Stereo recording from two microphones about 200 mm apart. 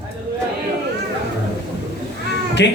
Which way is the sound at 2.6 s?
60° left (ahead or behind).